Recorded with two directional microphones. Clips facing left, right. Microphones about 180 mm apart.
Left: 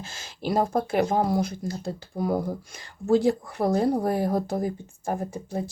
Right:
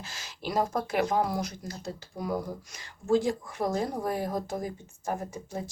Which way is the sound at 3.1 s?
65° left (ahead or behind).